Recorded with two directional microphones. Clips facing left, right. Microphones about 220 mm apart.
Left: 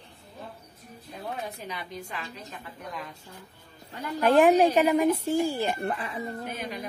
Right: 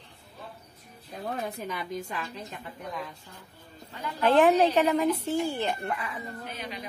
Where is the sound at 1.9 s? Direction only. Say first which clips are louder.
Right 4 dB; 45° right (ahead or behind).